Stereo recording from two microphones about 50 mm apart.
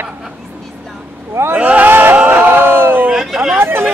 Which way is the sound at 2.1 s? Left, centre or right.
Right.